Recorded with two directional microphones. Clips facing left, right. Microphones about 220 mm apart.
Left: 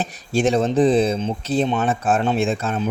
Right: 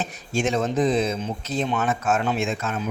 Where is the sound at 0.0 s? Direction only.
35° left (ahead or behind).